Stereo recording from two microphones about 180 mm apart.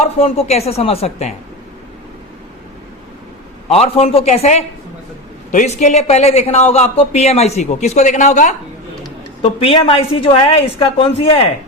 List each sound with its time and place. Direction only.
0.0 s a man's voice: 35° left (ahead or behind)
3.7 s a man's voice: 35° left (ahead or behind)
9.4 s a man's voice: 30° left (ahead or behind)